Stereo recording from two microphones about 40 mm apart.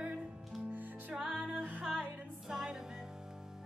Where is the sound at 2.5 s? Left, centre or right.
Centre.